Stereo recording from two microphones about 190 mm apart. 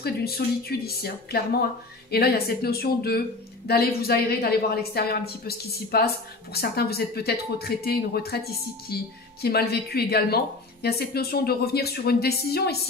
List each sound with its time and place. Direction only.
0.0 s speech: 55° left (ahead or behind)